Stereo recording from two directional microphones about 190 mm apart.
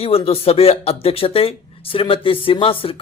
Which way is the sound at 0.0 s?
30° left (ahead or behind).